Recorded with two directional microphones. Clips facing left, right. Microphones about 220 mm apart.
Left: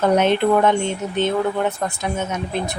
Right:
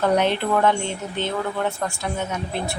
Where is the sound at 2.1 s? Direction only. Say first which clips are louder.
Left 3 dB; 20° left (ahead or behind).